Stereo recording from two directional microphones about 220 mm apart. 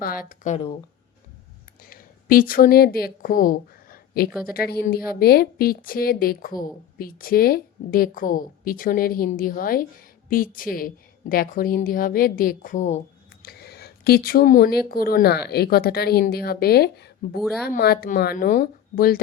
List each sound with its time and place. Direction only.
0.0 s a woman's voice: 40° left (ahead or behind)
1.8 s a woman's voice: 40° left (ahead or behind)
13.4 s a woman's voice: 45° left (ahead or behind)